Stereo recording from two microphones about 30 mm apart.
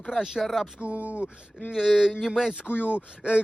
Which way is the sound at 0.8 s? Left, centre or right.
Right.